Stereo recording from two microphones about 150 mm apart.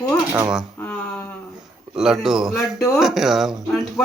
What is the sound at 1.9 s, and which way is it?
Speech, 5° right (ahead or behind).